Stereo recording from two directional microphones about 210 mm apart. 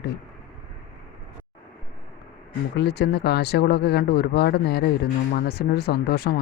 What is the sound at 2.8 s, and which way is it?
Speech, 50° left (ahead or behind).